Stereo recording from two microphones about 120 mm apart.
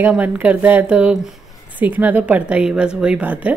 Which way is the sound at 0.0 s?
15° right (ahead or behind).